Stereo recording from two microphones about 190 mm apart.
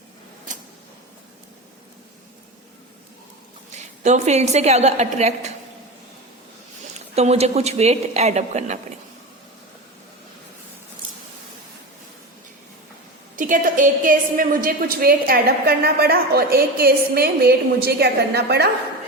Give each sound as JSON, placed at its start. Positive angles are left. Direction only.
{"t": 4.0, "sound": "speech", "side_deg": -35}
{"t": 7.2, "sound": "speech", "side_deg": -35}
{"t": 13.3, "sound": "a woman's voice", "side_deg": -45}